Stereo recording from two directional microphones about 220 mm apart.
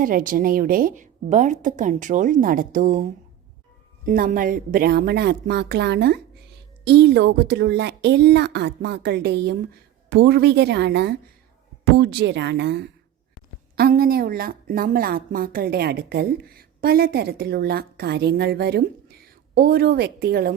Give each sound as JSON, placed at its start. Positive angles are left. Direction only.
{"t": 0.0, "sound": "a woman's voice", "side_deg": -40}